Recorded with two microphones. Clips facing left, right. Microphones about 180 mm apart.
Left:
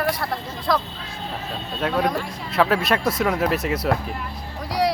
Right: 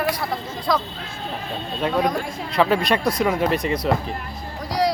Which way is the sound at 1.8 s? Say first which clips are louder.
Right 1 dB; centre (ahead or behind).